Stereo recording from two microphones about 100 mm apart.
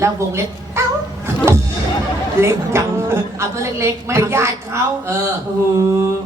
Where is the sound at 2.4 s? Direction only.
25° right (ahead or behind).